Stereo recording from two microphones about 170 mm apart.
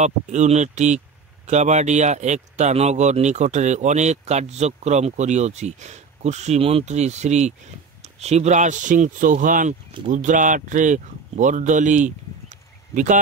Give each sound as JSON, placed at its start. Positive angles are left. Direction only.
{"t": 0.0, "sound": "speech", "side_deg": -45}